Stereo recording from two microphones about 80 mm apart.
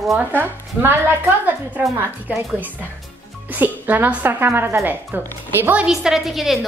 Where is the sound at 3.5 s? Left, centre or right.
Right.